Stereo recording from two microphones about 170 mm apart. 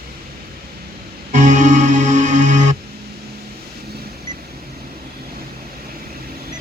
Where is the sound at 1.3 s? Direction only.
45° right (ahead or behind).